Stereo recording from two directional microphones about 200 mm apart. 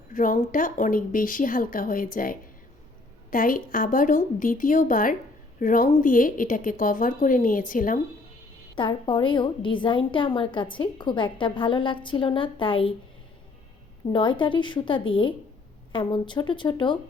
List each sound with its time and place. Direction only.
0.1 s speech: 40° left (ahead or behind)
8.7 s a woman's voice: 25° left (ahead or behind)
14.1 s a woman's voice: 25° left (ahead or behind)